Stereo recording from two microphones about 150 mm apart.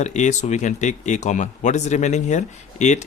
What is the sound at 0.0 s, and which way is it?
Speech, 50° left (ahead or behind).